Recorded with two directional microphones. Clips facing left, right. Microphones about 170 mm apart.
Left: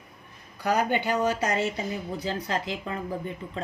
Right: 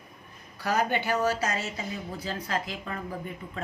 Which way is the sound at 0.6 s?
15° left (ahead or behind).